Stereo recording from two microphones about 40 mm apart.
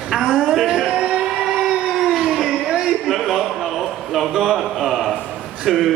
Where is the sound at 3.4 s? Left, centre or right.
Centre.